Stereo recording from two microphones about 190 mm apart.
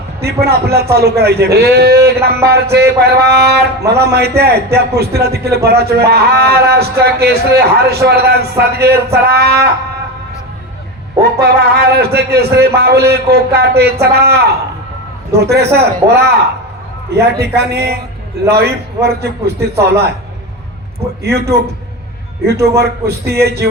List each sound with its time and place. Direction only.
0.2 s a man's voice: 60° right (ahead or behind)
11.2 s a man's voice: 55° right (ahead or behind)
21.2 s a man's voice: 60° right (ahead or behind)